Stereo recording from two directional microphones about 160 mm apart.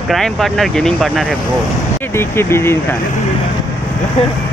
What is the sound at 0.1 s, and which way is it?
Speech, centre (ahead or behind).